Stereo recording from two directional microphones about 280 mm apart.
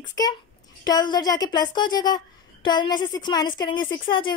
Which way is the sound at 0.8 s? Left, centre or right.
Centre.